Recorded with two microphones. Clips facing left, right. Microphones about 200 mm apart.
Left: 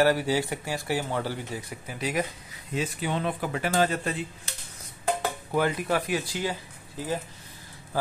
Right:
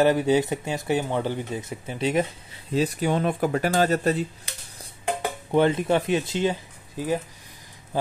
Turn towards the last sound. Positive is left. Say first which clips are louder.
# right 5 dB
turn(degrees=-20)  # may be behind; listen again after turning